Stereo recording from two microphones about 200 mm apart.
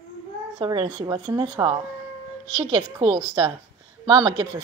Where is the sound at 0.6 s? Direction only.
25° right (ahead or behind).